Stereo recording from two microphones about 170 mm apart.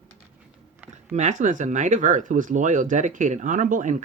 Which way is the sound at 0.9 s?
45° right (ahead or behind).